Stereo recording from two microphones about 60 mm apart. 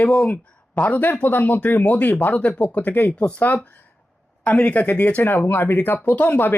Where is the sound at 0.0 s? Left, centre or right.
Left.